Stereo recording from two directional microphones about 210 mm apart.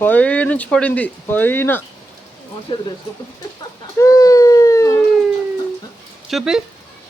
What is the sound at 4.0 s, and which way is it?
Baby cry, 15° left (ahead or behind).